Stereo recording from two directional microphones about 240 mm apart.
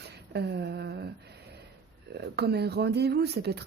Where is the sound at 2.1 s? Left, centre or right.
Right.